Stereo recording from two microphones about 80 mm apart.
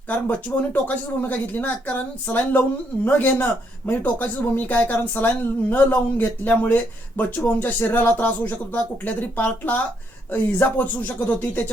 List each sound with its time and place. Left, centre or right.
0.1 s speech: centre